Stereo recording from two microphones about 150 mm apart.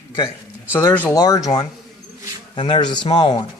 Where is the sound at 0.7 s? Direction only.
15° left (ahead or behind).